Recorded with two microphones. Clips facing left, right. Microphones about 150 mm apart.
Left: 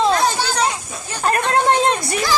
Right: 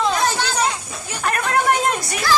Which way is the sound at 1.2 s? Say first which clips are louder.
Left 3 dB; 30° left (ahead or behind).